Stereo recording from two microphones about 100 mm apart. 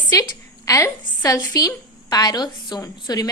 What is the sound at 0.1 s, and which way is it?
A woman's voice, 35° left (ahead or behind).